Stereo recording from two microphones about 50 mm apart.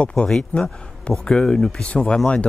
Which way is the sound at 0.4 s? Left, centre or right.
Left.